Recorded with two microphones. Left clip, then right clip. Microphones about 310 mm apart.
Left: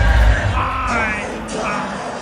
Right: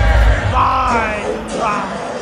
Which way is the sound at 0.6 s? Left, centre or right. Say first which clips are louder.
Right 8 dB; centre.